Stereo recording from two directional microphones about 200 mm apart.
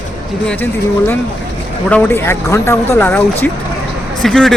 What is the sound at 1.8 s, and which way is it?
Speech, 10° left (ahead or behind).